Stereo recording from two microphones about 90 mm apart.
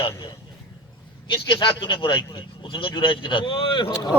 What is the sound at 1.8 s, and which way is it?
Speech, 65° left (ahead or behind).